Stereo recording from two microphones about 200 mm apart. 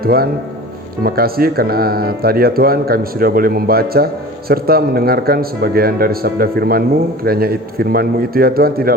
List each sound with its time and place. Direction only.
0.0 s speech: 50° right (ahead or behind)